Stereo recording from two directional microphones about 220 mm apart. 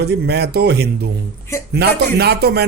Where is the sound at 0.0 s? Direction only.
50° right (ahead or behind).